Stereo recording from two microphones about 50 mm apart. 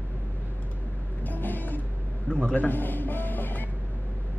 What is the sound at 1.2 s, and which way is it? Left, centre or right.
Vehicle, left.